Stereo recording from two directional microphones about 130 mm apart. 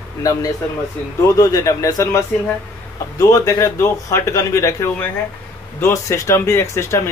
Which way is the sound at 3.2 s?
25° left (ahead or behind).